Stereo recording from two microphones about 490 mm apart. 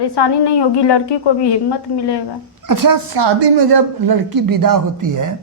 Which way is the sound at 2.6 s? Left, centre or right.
Right.